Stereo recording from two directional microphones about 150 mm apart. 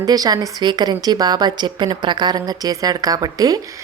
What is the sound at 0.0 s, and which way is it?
Speech, 25° right (ahead or behind).